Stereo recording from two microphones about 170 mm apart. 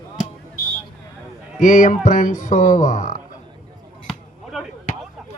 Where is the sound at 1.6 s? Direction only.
50° left (ahead or behind).